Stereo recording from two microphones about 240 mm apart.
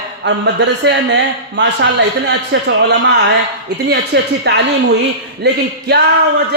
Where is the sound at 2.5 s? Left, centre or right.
Right.